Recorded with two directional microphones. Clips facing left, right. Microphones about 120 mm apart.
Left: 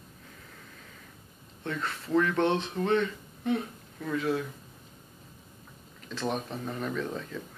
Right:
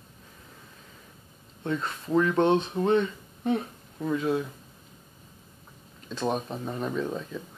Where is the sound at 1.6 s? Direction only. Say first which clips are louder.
Right 4 dB; 20° right (ahead or behind).